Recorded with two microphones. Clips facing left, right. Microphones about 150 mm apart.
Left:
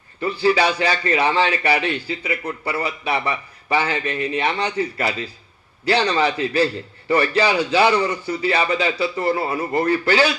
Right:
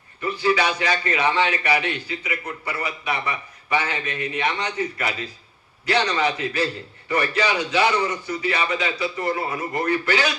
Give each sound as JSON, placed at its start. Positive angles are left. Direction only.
{"t": 0.3, "sound": "a man's voice", "side_deg": 30}